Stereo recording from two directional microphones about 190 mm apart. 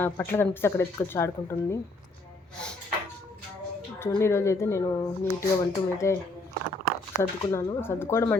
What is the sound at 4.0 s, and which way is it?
Speech, 15° left (ahead or behind).